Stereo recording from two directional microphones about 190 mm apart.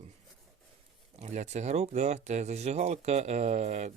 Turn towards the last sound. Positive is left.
turn(degrees=-35)  # may be behind; listen again after turning